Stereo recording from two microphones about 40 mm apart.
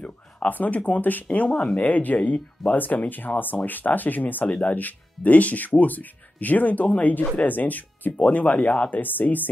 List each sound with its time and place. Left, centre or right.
0.0 s speech: left
8.2 s speech: left
8.9 s speech: left